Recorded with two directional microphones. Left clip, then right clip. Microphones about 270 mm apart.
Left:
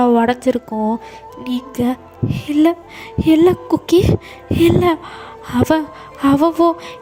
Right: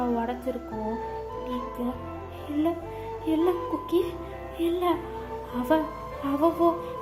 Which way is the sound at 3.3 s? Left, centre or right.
Left.